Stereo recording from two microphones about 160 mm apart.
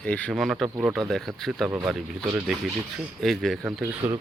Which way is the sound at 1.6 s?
15° right (ahead or behind).